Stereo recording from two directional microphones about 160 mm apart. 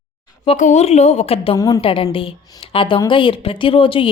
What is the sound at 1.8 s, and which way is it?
Speech, 35° left (ahead or behind).